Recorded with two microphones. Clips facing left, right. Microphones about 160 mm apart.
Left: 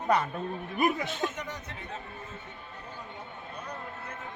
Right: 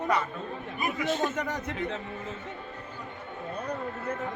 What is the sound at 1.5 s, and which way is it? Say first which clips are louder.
Speech: right 9 dB; 90° right.